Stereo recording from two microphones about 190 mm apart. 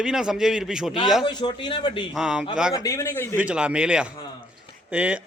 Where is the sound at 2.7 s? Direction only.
15° left (ahead or behind).